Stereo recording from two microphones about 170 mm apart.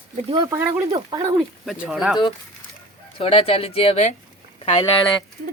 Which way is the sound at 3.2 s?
35° left (ahead or behind).